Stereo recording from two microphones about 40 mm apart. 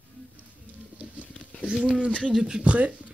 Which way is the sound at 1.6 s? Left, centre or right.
Right.